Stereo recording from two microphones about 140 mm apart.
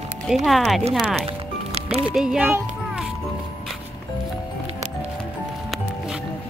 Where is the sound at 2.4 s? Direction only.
10° right (ahead or behind).